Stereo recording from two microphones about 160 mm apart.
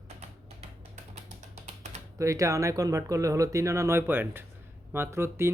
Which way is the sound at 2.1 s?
20° right (ahead or behind).